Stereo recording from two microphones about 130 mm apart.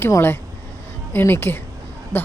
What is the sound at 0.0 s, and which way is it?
Speech, 15° left (ahead or behind).